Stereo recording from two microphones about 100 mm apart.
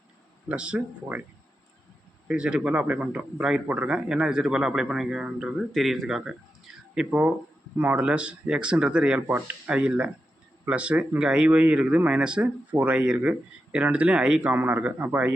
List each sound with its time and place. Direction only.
0.4 s speech: 10° right (ahead or behind)
2.2 s speech: 10° right (ahead or behind)
9.2 s a man's voice: 25° right (ahead or behind)
9.6 s speech: 10° right (ahead or behind)
14.5 s a man's voice: 20° right (ahead or behind)